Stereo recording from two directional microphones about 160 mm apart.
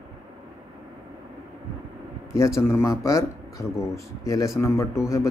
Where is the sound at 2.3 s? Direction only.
20° left (ahead or behind).